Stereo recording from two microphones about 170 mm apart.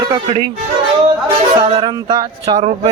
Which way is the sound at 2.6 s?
40° right (ahead or behind).